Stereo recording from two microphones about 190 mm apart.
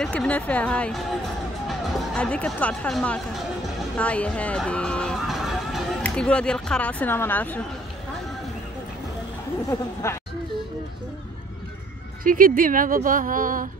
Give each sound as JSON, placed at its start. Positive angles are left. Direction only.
{"t": 0.0, "sound": "a woman's voice", "side_deg": 5}
{"t": 10.0, "sound": "speech", "side_deg": 15}
{"t": 12.2, "sound": "a woman's voice", "side_deg": -45}